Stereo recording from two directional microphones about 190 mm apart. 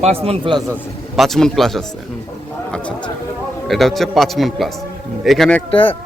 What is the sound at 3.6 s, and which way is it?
A man's voice, centre (ahead or behind).